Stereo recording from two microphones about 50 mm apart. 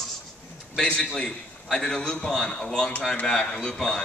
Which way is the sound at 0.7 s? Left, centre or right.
Centre.